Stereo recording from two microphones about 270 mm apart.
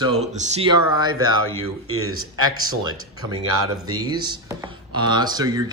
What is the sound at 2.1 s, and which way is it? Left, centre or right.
Speech, right.